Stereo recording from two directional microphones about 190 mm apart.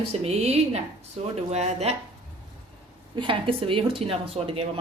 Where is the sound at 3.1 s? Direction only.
25° right (ahead or behind).